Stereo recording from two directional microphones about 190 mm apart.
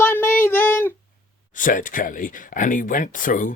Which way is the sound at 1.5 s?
45° left (ahead or behind).